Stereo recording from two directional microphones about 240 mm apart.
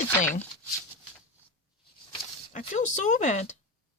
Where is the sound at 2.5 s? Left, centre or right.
Left.